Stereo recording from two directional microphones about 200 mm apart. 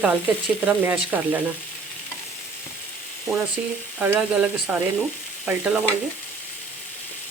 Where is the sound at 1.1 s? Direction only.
5° right (ahead or behind).